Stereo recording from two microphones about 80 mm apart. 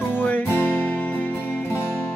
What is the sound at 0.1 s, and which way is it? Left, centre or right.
Music, left.